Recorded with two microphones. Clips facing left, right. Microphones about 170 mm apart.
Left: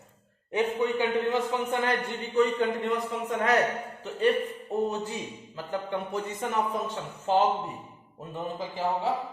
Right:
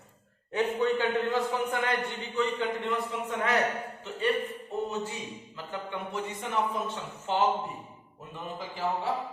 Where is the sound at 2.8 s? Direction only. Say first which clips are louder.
Left 3 dB; 40° left (ahead or behind).